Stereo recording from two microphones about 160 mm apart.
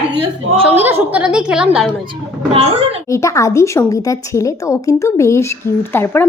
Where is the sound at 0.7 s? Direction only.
10° right (ahead or behind).